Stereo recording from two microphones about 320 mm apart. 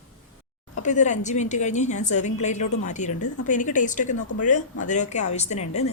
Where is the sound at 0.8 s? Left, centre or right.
Left.